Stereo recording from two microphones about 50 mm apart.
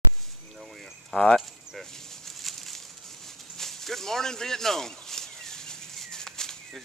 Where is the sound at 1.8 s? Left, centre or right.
Centre.